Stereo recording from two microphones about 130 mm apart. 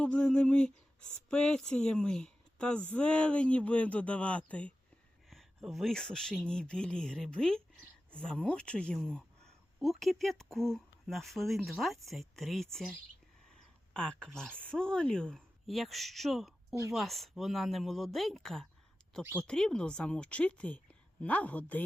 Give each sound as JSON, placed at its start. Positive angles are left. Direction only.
{"t": 0.0, "sound": "speech", "side_deg": 5}
{"t": 13.5, "sound": "a sound", "side_deg": 5}
{"t": 14.6, "sound": "speech", "side_deg": 5}
{"t": 19.2, "sound": "speech", "side_deg": -15}
{"t": 19.5, "sound": "speech", "side_deg": 5}